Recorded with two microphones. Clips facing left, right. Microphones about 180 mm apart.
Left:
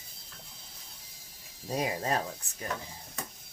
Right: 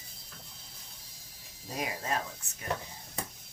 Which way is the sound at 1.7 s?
35° left (ahead or behind).